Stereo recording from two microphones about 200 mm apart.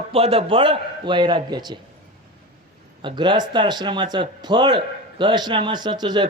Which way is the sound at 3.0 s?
25° right (ahead or behind).